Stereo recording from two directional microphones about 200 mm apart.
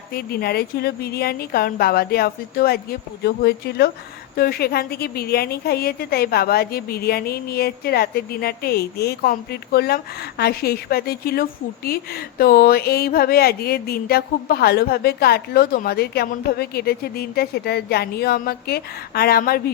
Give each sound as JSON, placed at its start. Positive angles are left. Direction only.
{"t": 0.1, "sound": "speech", "side_deg": 50}